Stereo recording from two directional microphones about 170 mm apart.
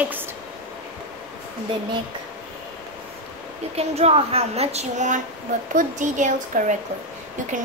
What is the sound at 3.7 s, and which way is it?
A woman's voice, 40° right (ahead or behind).